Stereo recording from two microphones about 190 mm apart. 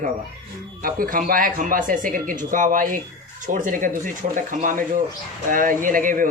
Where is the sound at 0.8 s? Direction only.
50° right (ahead or behind).